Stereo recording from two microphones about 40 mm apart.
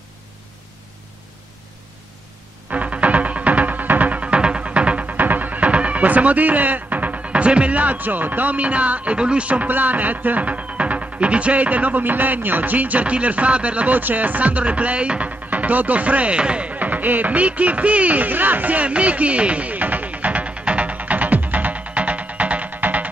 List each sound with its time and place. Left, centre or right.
2.7 s music: right
5.1 s music: right
5.7 s speech: right
9.1 s speech: right
9.5 s music: right
13.9 s music: right
16.3 s speech: right
16.7 s a sound: right